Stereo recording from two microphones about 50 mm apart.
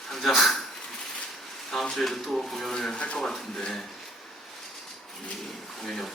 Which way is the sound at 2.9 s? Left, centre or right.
Left.